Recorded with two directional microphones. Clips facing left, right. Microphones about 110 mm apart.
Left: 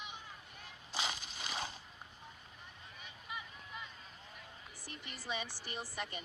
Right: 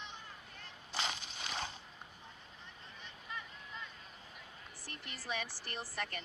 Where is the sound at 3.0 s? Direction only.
10° left (ahead or behind).